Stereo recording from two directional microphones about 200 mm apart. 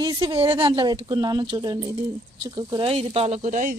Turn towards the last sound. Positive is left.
turn(degrees=-40)  # may be behind; listen again after turning